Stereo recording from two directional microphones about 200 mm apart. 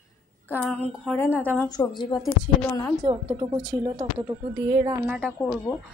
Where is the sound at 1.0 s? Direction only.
10° left (ahead or behind).